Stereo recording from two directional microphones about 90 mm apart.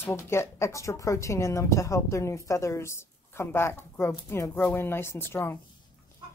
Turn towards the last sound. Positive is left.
turn(degrees=25)  # may be behind; listen again after turning